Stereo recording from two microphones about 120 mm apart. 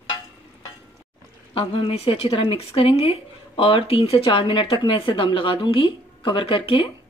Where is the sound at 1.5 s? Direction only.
50° left (ahead or behind).